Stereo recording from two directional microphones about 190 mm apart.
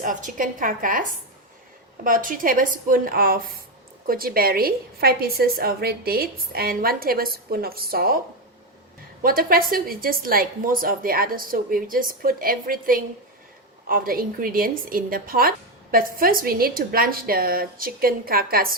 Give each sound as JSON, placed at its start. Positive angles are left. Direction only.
{"t": 0.0, "sound": "a woman's voice", "side_deg": -45}
{"t": 2.0, "sound": "a woman's voice", "side_deg": -45}
{"t": 9.2, "sound": "a woman's voice", "side_deg": -50}